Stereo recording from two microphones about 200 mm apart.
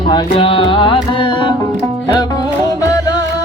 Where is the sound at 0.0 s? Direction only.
25° left (ahead or behind).